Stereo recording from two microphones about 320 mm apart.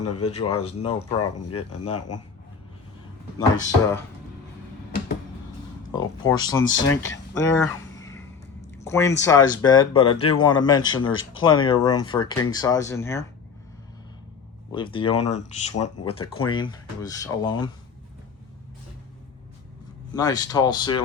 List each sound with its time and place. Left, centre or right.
0.5 s speech: left
3.3 s speech: centre
5.9 s speech: centre
6.7 s speech: left
7.3 s a sound: centre
9.2 s speech: centre
10.2 s speech: left
10.4 s speech: centre
11.1 s speech: left
11.4 s speech: centre
14.7 s speech: centre
20.1 s speech: centre